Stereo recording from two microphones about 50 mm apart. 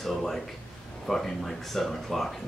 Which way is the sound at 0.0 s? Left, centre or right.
Centre.